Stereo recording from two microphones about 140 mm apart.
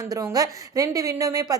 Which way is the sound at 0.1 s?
25° right (ahead or behind).